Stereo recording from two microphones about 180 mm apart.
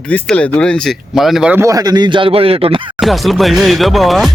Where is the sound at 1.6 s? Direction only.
20° right (ahead or behind).